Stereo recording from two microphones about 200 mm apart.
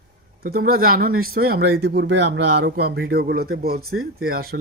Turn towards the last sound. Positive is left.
turn(degrees=-50)  # may be behind; listen again after turning